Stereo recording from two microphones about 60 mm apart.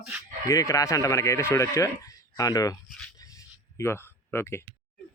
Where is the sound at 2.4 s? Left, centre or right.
Left.